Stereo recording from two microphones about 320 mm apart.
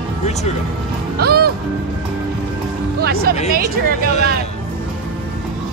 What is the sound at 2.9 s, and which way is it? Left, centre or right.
Speech, right.